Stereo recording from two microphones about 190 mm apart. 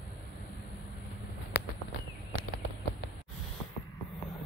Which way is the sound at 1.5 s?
55° left (ahead or behind).